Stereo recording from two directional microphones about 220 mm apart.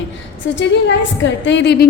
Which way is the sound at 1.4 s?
55° left (ahead or behind).